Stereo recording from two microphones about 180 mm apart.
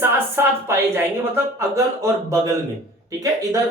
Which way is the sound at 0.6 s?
15° right (ahead or behind).